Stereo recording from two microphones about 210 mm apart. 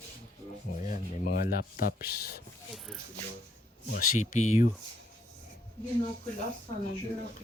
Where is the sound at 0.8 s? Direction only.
40° left (ahead or behind).